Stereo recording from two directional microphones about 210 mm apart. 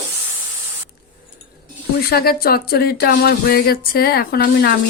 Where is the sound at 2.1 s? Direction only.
50° left (ahead or behind).